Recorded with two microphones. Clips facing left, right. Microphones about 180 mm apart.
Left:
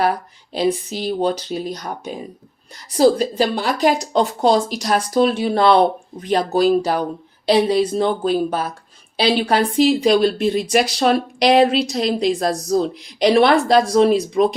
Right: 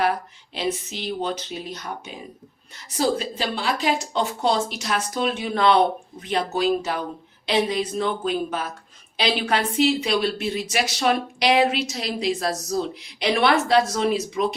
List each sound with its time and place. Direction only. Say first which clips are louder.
0.5 s a woman's voice: left 7 dB; 35° left (ahead or behind)